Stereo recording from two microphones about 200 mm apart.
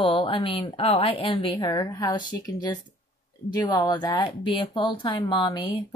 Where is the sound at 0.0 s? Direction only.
25° left (ahead or behind).